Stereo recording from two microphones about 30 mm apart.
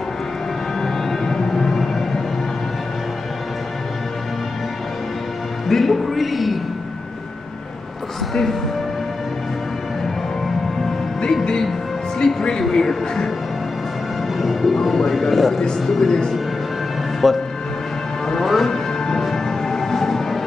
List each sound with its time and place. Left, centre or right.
0.7 s vehicle: centre
1.5 s music: centre
5.7 s music: centre
8.3 s speech: centre
12.2 s music: centre
12.7 s speech: centre
14.4 s speech: centre
16.1 s speech: centre
17.2 s speech: centre
18.4 s music: centre